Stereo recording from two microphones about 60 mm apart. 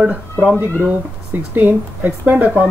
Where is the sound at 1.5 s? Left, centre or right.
Right.